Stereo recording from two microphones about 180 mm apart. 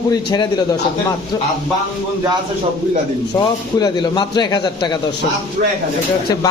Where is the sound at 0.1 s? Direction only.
25° left (ahead or behind).